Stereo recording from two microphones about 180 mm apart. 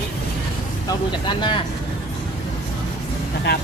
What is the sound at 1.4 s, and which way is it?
Speech, 25° left (ahead or behind).